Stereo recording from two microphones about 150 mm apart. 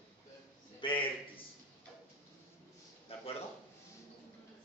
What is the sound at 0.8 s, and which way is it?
Speech, 35° left (ahead or behind).